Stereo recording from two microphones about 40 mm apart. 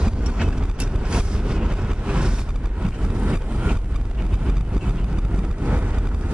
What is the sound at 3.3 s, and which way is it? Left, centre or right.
Vehicle, right.